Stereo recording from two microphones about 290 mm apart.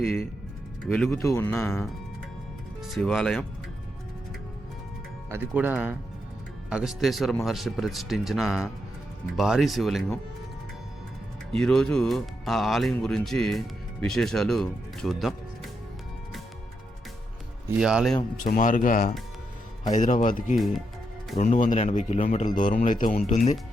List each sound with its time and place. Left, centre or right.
0.0 s speech: centre
2.9 s speech: centre
5.3 s speech: centre
11.5 s speech: centre
17.7 s speech: centre
18.2 s a man's voice: left